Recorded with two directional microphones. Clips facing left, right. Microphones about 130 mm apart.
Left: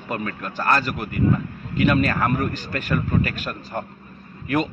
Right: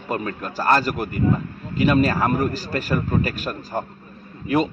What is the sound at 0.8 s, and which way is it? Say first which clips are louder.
Speech: right 3 dB; 40° right (ahead or behind).